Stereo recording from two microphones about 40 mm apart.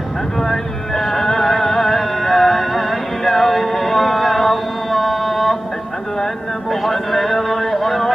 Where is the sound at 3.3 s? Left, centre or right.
Centre.